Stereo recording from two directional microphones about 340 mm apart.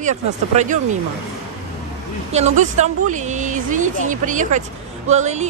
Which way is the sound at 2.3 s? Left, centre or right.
Centre.